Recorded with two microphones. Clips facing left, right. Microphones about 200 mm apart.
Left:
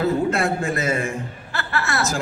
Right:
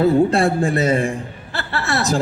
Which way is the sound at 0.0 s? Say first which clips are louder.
Right 6 dB; 35° right (ahead or behind).